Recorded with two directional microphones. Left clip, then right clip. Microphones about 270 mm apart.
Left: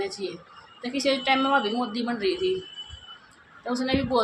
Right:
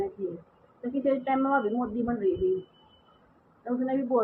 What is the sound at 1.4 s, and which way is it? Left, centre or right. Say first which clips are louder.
Speech: left 3 dB; left.